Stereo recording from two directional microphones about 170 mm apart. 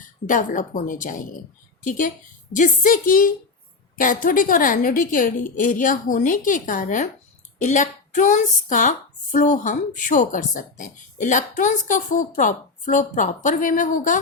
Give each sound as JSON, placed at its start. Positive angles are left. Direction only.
{"t": 0.3, "sound": "a woman's voice", "side_deg": 50}